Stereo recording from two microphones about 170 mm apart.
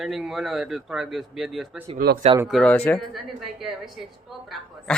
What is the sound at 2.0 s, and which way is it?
Speech, 65° right (ahead or behind).